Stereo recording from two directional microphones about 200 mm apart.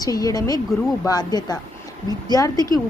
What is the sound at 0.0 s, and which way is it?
A woman's voice, 20° left (ahead or behind).